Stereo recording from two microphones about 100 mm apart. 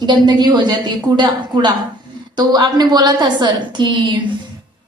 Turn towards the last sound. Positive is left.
turn(degrees=-50)  # may be behind; listen again after turning